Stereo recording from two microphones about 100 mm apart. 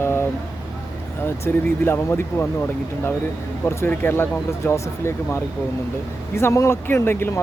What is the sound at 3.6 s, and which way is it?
Speech, 20° left (ahead or behind).